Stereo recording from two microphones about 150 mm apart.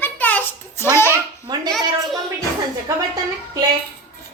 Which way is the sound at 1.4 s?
25° right (ahead or behind).